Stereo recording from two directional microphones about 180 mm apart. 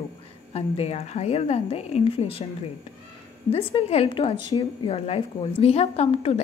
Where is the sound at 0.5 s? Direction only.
35° left (ahead or behind).